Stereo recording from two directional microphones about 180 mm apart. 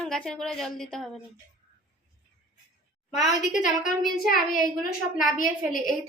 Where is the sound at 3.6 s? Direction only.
45° left (ahead or behind).